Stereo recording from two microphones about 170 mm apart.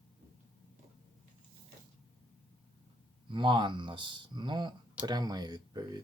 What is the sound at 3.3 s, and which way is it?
Speech, 30° right (ahead or behind).